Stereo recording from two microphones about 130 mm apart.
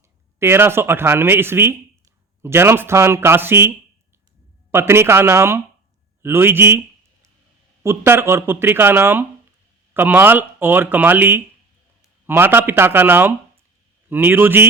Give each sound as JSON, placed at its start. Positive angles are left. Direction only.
{"t": 0.3, "sound": "speech", "side_deg": -20}
{"t": 4.7, "sound": "speech", "side_deg": -20}